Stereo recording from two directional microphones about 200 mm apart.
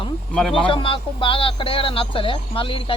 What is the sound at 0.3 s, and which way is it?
Speech, centre (ahead or behind).